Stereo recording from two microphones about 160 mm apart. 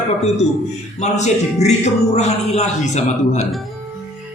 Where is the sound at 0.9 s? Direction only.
45° left (ahead or behind).